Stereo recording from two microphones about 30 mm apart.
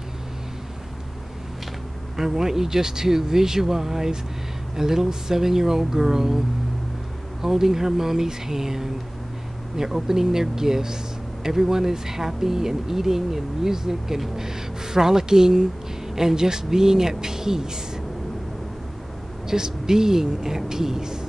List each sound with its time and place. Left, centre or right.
2.1 s speech: centre
7.4 s speech: centre
19.4 s speech: centre